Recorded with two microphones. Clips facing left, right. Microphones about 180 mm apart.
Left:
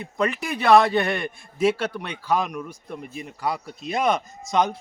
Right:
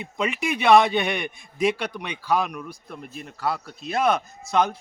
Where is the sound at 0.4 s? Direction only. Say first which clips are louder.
Even; centre (ahead or behind).